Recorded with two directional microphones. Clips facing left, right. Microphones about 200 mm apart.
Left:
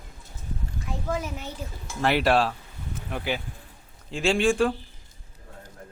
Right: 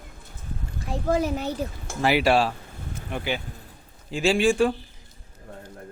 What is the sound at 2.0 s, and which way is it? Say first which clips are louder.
Speech: right 1 dB; centre (ahead or behind).